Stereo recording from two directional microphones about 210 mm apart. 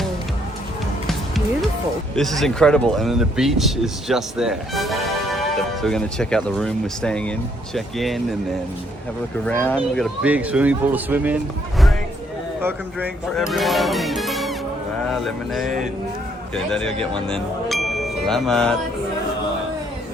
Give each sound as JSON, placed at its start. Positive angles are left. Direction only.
{"t": 2.1, "sound": "speech", "side_deg": 0}
{"t": 9.5, "sound": "speech", "side_deg": 5}
{"t": 13.3, "sound": "speech", "side_deg": 0}
{"t": 16.7, "sound": "speech", "side_deg": 5}
{"t": 17.2, "sound": "music", "side_deg": 0}